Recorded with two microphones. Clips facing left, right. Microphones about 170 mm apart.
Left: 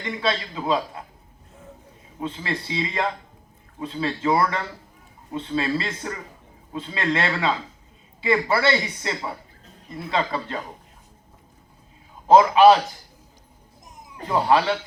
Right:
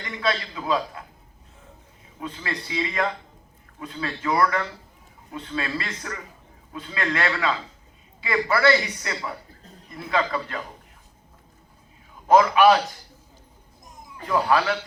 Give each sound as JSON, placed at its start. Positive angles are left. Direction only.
{"t": 0.0, "sound": "a man's voice", "side_deg": 25}
{"t": 2.2, "sound": "a man's voice", "side_deg": 25}
{"t": 12.3, "sound": "a man's voice", "side_deg": 25}
{"t": 14.3, "sound": "a man's voice", "side_deg": 25}